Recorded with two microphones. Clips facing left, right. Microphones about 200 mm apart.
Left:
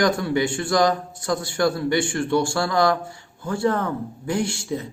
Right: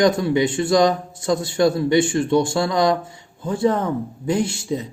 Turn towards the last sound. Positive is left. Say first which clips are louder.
# right 3 dB
turn(degrees=-20)  # may be behind; listen again after turning